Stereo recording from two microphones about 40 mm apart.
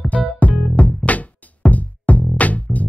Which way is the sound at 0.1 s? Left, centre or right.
Left.